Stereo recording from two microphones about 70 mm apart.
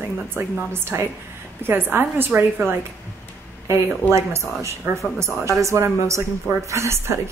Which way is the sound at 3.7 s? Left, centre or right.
Right.